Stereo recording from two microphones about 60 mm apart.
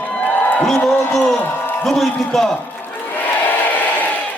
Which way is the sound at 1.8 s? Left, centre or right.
Centre.